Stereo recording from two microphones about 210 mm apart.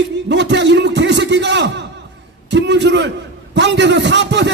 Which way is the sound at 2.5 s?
55° right (ahead or behind).